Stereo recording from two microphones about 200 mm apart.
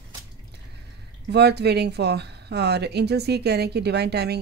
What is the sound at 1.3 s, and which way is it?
Speech, 55° right (ahead or behind).